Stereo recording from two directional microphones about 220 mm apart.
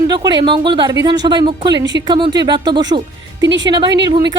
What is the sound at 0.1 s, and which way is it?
Speech, 20° right (ahead or behind).